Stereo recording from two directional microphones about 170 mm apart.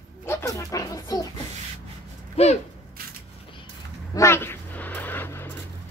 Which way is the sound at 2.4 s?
35° left (ahead or behind).